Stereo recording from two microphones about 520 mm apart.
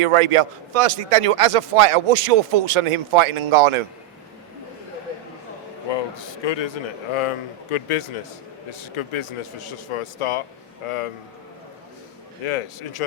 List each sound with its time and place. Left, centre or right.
0.0 s a man's voice: right
5.9 s a man's voice: left
7.2 s speech: left
12.5 s speech: left